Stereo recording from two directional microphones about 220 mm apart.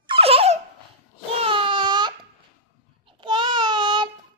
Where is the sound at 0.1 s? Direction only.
25° right (ahead or behind).